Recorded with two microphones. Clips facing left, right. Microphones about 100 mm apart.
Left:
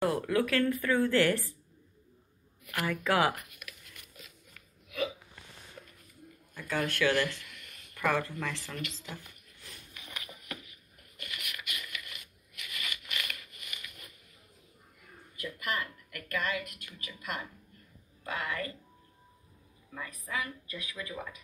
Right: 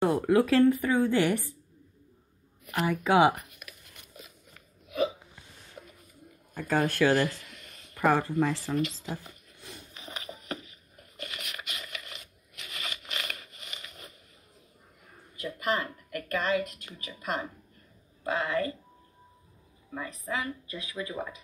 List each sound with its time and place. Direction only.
0.0 s speech: 25° right (ahead or behind)
2.6 s tearing: 30° right (ahead or behind)
5.8 s a sound: 20° right (ahead or behind)
6.6 s a sound: 30° right (ahead or behind)
15.3 s a woman's voice: 30° right (ahead or behind)
19.9 s speech: 25° right (ahead or behind)